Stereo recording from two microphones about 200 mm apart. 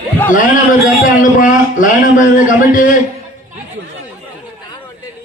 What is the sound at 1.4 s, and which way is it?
Speech, 40° left (ahead or behind).